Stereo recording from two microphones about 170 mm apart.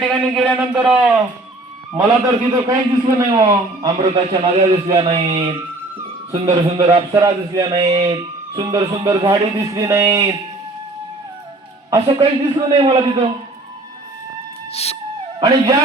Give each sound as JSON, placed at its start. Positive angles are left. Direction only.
{"t": 0.0, "sound": "speech", "side_deg": 5}
{"t": 0.7, "sound": "a sound", "side_deg": -5}
{"t": 2.0, "sound": "a man's voice", "side_deg": -20}
{"t": 11.9, "sound": "a man's voice", "side_deg": -25}
{"t": 14.7, "sound": "music", "side_deg": 35}
{"t": 15.4, "sound": "a man's voice", "side_deg": -25}